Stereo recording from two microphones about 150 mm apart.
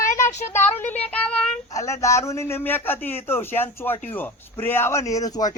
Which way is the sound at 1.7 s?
20° left (ahead or behind).